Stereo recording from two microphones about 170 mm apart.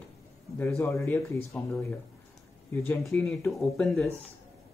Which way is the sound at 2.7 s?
15° left (ahead or behind).